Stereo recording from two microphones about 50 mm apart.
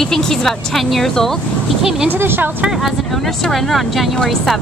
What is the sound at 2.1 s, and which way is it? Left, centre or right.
Speech, right.